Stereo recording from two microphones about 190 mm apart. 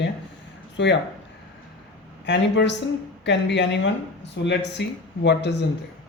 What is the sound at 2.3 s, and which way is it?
Speech, 65° left (ahead or behind).